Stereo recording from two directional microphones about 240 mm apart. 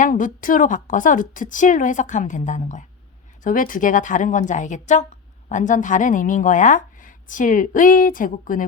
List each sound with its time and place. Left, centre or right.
0.0 s speech: left